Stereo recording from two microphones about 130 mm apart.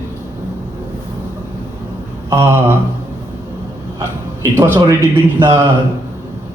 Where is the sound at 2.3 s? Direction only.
20° right (ahead or behind).